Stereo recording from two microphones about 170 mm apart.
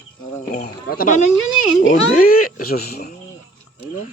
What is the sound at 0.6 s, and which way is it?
Speech, 60° left (ahead or behind).